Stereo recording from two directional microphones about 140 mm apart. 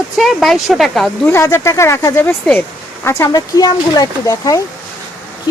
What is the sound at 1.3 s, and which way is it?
Speech, 20° left (ahead or behind).